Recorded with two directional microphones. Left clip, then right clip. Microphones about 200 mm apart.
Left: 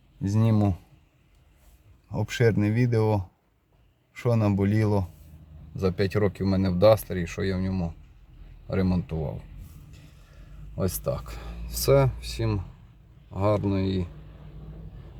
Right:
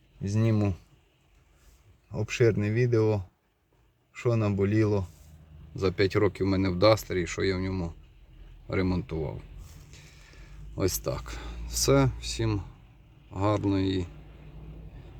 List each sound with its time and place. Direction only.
0.2 s speech: 20° left (ahead or behind)
2.1 s speech: 15° left (ahead or behind)
5.7 s speech: centre (ahead or behind)
10.8 s speech: 10° right (ahead or behind)